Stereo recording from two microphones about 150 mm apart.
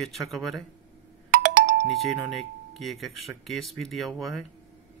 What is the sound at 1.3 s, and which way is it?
Doorbell, 60° right (ahead or behind).